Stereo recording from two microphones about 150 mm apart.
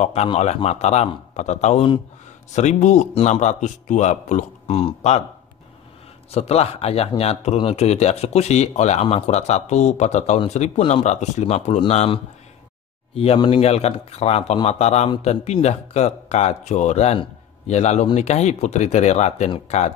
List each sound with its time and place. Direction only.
0.0 s speech: 45° left (ahead or behind)
6.3 s speech: 40° left (ahead or behind)
10.8 s speech: 35° left (ahead or behind)
11.1 s speech: 50° left (ahead or behind)